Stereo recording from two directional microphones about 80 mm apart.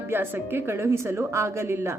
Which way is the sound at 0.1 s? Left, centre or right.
Right.